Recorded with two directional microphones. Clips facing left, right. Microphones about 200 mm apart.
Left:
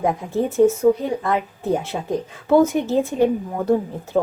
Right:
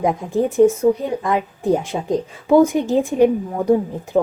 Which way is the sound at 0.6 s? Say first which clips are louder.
Right 1 dB; 15° right (ahead or behind).